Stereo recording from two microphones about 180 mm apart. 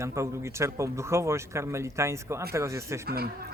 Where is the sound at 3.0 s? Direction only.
60° right (ahead or behind).